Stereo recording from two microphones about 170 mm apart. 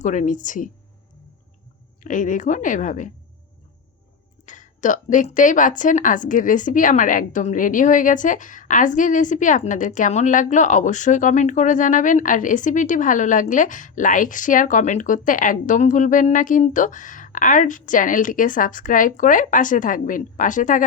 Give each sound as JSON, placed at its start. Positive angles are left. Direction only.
{"t": 0.0, "sound": "a woman's voice", "side_deg": 45}
{"t": 2.0, "sound": "a woman's voice", "side_deg": 50}
{"t": 4.4, "sound": "a woman's voice", "side_deg": 50}